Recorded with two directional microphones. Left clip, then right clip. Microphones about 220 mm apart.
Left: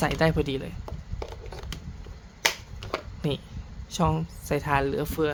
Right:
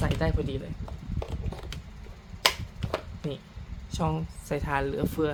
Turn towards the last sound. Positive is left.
turn(degrees=20)  # may be behind; listen again after turning